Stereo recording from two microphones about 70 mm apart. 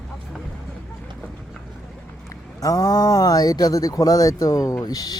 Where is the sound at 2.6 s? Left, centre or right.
Left.